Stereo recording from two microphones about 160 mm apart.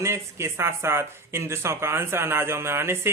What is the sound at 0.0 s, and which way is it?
Speech, 15° right (ahead or behind).